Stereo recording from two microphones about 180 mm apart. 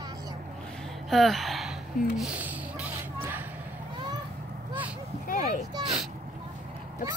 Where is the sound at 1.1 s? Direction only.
Centre (ahead or behind).